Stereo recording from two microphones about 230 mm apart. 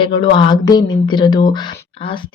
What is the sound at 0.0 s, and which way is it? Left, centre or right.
Speech, centre.